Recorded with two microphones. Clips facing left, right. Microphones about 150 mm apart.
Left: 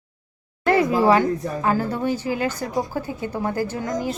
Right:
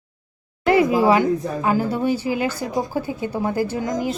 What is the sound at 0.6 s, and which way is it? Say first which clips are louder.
Speech: right 2 dB; 15° right (ahead or behind).